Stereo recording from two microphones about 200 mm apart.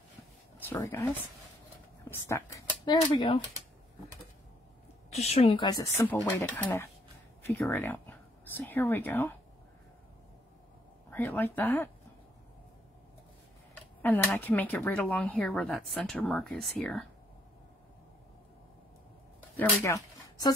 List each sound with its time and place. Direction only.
0.7 s speech: 10° left (ahead or behind)
5.1 s speech: 30° left (ahead or behind); by 9.3 s 10° left (ahead or behind)
11.1 s speech: 10° left (ahead or behind)
14.0 s speech: 10° left (ahead or behind)
19.5 s speech: 15° left (ahead or behind)